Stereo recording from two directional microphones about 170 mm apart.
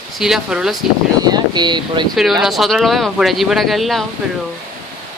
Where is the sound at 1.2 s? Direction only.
25° right (ahead or behind).